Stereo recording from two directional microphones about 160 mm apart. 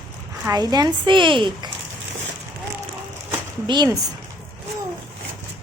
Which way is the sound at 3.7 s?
25° right (ahead or behind).